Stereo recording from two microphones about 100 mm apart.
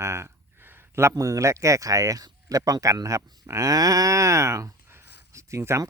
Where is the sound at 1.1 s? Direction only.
35° right (ahead or behind).